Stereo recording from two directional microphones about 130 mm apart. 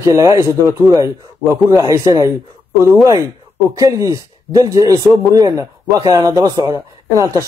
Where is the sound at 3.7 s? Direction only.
25° right (ahead or behind).